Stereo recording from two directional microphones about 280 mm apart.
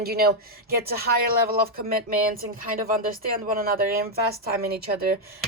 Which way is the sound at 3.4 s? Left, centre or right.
Right.